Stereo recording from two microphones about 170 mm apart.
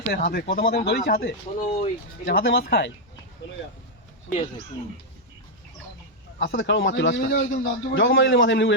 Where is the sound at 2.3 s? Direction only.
75° left (ahead or behind).